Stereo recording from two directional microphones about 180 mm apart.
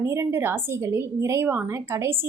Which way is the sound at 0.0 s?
15° right (ahead or behind).